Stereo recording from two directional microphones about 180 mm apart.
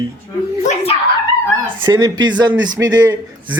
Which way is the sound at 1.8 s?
25° right (ahead or behind).